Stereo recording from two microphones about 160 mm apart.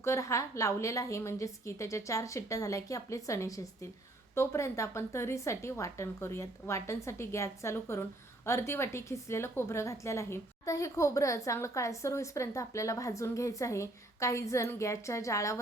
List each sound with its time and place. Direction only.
0.0 s a woman's voice: 20° left (ahead or behind)